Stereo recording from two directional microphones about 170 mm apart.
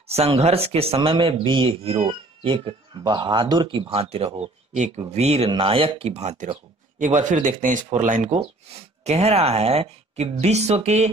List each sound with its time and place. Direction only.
0.1 s speech: 35° right (ahead or behind)